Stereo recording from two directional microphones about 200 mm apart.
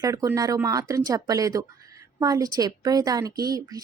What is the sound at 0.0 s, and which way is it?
A woman's voice, 15° right (ahead or behind).